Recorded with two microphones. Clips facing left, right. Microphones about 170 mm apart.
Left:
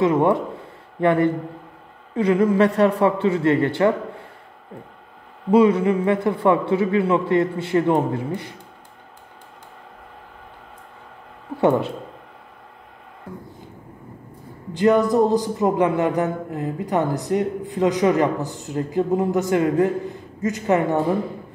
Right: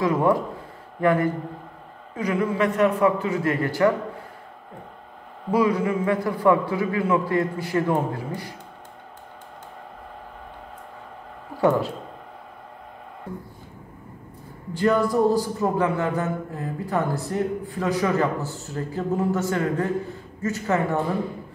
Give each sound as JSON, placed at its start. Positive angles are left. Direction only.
{"t": 0.0, "sound": "a man's voice", "side_deg": 25}
{"t": 5.5, "sound": "a man's voice", "side_deg": 25}
{"t": 11.6, "sound": "a man's voice", "side_deg": 20}
{"t": 14.7, "sound": "a man's voice", "side_deg": 20}